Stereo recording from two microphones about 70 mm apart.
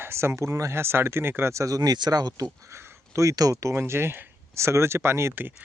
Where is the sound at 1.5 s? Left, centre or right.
Right.